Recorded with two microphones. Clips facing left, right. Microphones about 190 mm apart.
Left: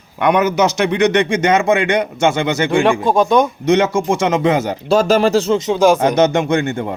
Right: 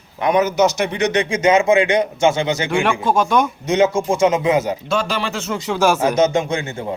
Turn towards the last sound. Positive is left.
turn(degrees=60)  # may be behind; listen again after turning